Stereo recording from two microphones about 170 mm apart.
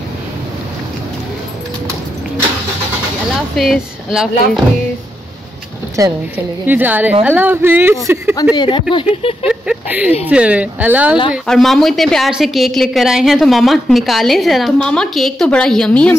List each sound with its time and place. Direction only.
3.5 s a woman's voice: centre (ahead or behind)
6.0 s a woman's voice: 20° right (ahead or behind)
8.5 s speech: 30° left (ahead or behind)
9.5 s a woman's voice: 5° right (ahead or behind)